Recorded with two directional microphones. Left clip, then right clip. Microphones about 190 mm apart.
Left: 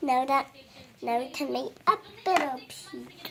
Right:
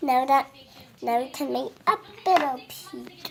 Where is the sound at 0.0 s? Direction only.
30° right (ahead or behind).